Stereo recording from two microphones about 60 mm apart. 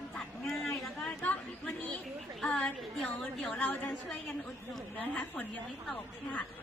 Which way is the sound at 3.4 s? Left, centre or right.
Left.